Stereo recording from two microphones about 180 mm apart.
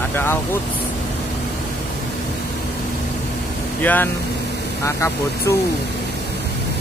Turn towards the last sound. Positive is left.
turn(degrees=15)  # may be behind; listen again after turning